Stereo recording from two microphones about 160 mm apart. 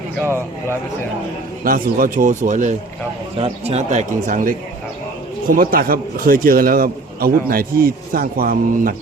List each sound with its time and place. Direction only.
1.6 s a man's voice: 60° right (ahead or behind)
3.3 s a man's voice: 40° right (ahead or behind); by 9.0 s 60° right (ahead or behind)